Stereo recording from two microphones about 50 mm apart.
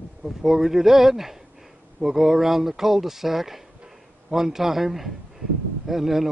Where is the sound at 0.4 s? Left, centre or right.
Centre.